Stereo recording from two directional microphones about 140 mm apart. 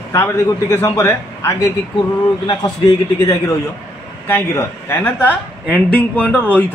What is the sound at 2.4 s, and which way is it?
A man's voice, 30° left (ahead or behind).